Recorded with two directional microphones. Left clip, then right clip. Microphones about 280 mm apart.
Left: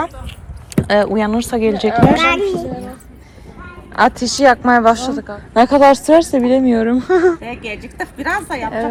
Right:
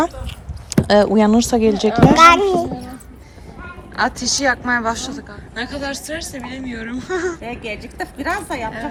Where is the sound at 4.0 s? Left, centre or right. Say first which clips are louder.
Left 7 dB; centre.